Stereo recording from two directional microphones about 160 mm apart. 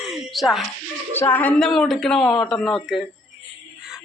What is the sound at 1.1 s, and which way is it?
Speech, 15° left (ahead or behind).